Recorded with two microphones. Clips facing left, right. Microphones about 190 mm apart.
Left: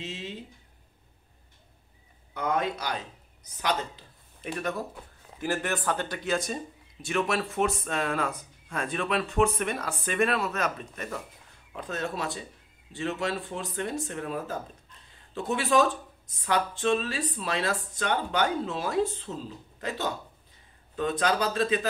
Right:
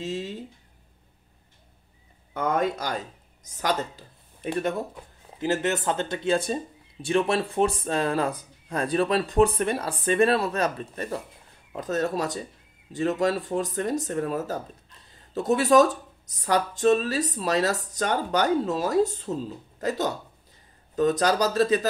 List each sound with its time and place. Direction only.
0.0 s speech: 40° right (ahead or behind)
2.3 s speech: 50° right (ahead or behind)
4.5 s speech: 25° right (ahead or behind)